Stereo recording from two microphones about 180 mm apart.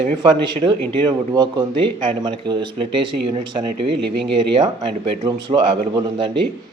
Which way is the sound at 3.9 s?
70° right (ahead or behind).